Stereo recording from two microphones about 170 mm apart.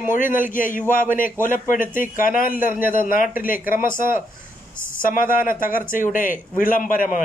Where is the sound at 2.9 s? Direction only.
55° left (ahead or behind).